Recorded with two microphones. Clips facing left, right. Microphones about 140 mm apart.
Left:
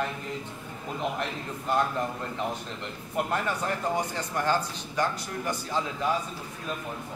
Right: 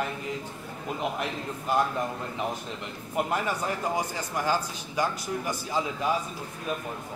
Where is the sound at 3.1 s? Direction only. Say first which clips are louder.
Right 1 dB; 10° right (ahead or behind).